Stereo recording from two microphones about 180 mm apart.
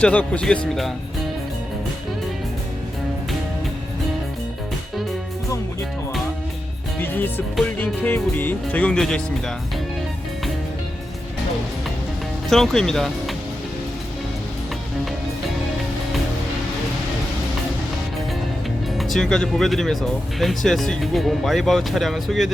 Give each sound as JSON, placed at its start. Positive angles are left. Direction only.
{"t": 0.0, "sound": "speech", "side_deg": 5}
{"t": 7.0, "sound": "music", "side_deg": 10}
{"t": 7.5, "sound": "speech", "side_deg": 10}
{"t": 12.5, "sound": "speech", "side_deg": 0}
{"t": 18.9, "sound": "speech", "side_deg": 0}